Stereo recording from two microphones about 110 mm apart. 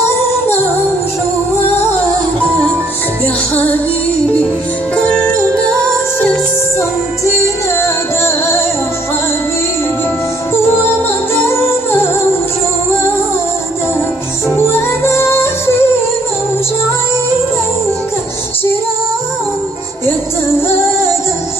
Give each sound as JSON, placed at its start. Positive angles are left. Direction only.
{"t": 4.9, "sound": "music", "side_deg": 10}
{"t": 10.5, "sound": "music", "side_deg": 20}
{"t": 14.5, "sound": "music", "side_deg": 25}